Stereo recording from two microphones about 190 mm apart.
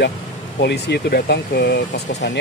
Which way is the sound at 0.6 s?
60° left (ahead or behind).